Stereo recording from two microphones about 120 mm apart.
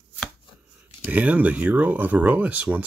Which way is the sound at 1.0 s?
10° right (ahead or behind).